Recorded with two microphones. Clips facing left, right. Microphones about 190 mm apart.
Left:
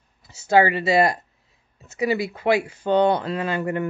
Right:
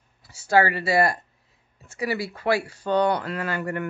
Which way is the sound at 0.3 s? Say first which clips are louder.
Left 3 dB; 20° left (ahead or behind).